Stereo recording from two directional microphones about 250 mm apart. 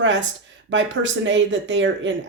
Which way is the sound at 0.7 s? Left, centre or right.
Right.